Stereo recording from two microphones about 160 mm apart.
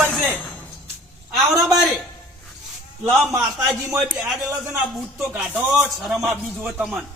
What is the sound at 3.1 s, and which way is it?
Speech, 15° right (ahead or behind).